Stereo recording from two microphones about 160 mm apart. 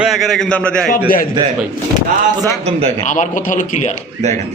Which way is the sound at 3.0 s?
50° left (ahead or behind).